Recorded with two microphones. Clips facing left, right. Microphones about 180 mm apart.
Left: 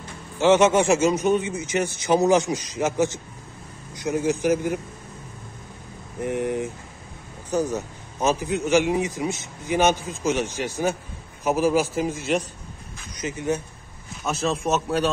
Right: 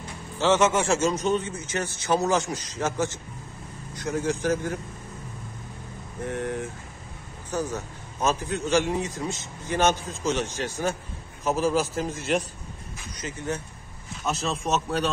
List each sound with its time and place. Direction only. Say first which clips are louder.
0.4 s a man's voice: left 5 dB; 15° left (ahead or behind)
6.2 s a man's voice: left 5 dB; 15° left (ahead or behind)
13.2 s a man's voice: left 6 dB; 15° left (ahead or behind)